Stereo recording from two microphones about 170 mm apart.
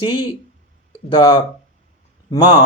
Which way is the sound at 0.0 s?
25° left (ahead or behind).